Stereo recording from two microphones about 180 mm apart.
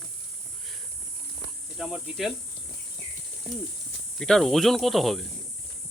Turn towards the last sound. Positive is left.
turn(degrees=0)  # may be behind; listen again after turning